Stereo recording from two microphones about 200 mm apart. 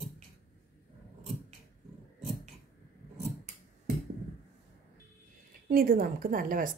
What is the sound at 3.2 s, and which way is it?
Scissors, 35° right (ahead or behind).